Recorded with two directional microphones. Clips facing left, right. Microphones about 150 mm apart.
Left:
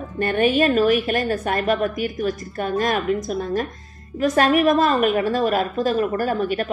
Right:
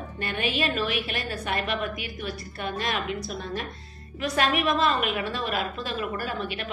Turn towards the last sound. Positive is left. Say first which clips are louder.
# left 10 dB
turn(degrees=45)  # may be behind; listen again after turning